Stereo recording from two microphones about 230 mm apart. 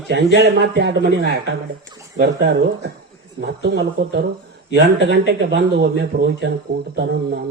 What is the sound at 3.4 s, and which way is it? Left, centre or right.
A man's voice, right.